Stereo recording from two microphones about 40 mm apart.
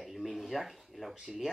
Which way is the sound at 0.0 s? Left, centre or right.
Centre.